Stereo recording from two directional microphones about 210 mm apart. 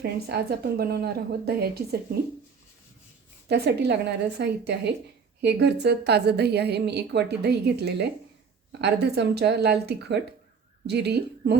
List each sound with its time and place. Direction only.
0.0 s a woman's voice: 50° right (ahead or behind)
3.5 s a woman's voice: 50° right (ahead or behind)